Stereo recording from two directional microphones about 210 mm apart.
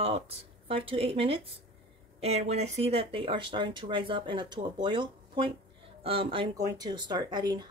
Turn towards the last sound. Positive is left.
turn(degrees=-20)  # may be behind; listen again after turning